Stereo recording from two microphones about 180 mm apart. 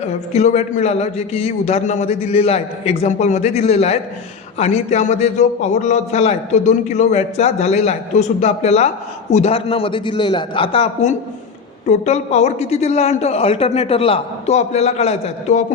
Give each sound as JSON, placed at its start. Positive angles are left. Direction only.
{"t": 0.0, "sound": "a man's voice", "side_deg": 40}